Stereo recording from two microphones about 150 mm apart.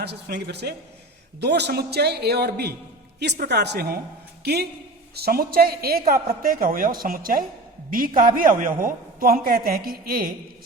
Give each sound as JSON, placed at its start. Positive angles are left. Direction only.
{"t": 0.0, "sound": "a woman's voice", "side_deg": -90}